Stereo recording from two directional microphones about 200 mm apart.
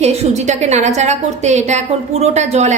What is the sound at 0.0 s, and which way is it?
A woman's voice, 30° right (ahead or behind).